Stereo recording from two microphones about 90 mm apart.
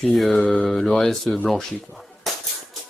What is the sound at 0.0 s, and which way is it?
Speech, centre (ahead or behind).